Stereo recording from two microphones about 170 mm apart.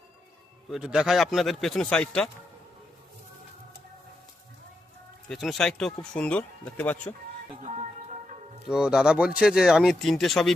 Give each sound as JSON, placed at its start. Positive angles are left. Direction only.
{"t": 0.7, "sound": "speech", "side_deg": -5}
{"t": 5.3, "sound": "speech", "side_deg": 0}
{"t": 7.6, "sound": "music", "side_deg": -40}
{"t": 8.7, "sound": "speech", "side_deg": -5}